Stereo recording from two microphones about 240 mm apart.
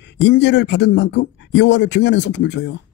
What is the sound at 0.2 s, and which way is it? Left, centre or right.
Speech, left.